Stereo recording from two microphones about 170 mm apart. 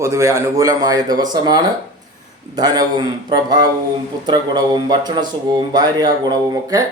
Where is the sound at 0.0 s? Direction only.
15° right (ahead or behind).